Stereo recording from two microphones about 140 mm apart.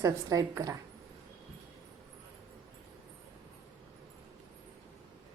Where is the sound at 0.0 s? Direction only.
25° right (ahead or behind).